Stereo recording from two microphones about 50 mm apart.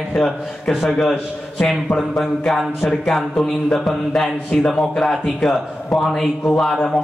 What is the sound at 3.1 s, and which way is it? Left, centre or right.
A man's voice, centre.